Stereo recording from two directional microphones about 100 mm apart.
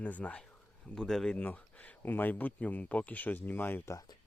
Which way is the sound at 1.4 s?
15° left (ahead or behind).